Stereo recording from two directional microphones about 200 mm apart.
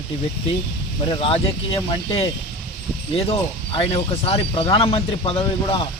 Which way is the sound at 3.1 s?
30° left (ahead or behind).